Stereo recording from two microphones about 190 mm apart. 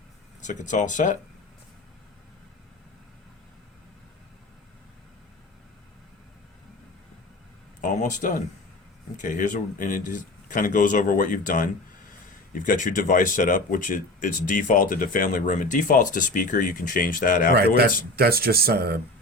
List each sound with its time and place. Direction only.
0.4 s speech: 40° left (ahead or behind)
7.8 s speech: 40° left (ahead or behind)
18.2 s speech: 55° right (ahead or behind)